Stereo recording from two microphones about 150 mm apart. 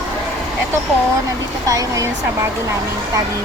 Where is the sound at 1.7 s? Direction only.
20° right (ahead or behind).